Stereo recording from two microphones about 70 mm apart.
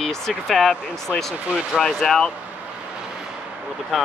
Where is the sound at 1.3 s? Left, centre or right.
Centre.